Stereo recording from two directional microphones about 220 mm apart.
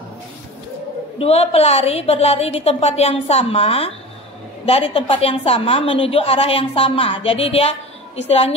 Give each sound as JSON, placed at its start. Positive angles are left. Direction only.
{"t": 1.1, "sound": "a woman's voice", "side_deg": 25}